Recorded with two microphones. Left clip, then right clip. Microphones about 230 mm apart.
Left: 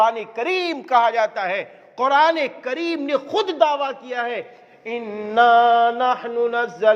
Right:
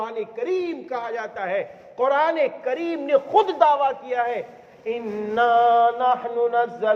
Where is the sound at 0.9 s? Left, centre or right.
Left.